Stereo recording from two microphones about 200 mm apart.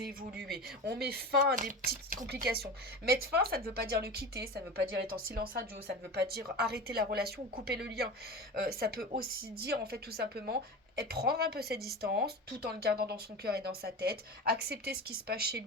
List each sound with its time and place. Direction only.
0.0 s speech: 50° right (ahead or behind)